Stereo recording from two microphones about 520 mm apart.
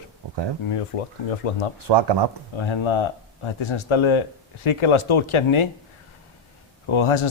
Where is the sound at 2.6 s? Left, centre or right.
Left.